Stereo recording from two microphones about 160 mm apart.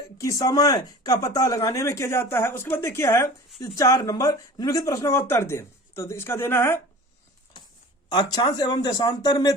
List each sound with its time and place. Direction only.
0.2 s speech: 20° left (ahead or behind)
8.1 s speech: 25° left (ahead or behind)